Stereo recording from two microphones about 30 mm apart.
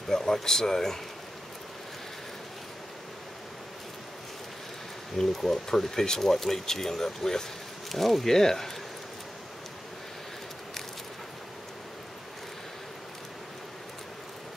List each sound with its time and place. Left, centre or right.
0.1 s speech: centre
5.1 s speech: centre
7.9 s speech: centre